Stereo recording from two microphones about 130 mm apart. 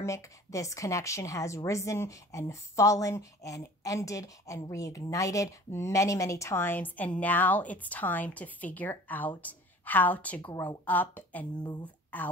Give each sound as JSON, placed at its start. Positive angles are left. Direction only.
{"t": 0.0, "sound": "a woman's voice", "side_deg": 25}
{"t": 10.5, "sound": "a woman's voice", "side_deg": 30}
{"t": 10.9, "sound": "a woman's voice", "side_deg": 15}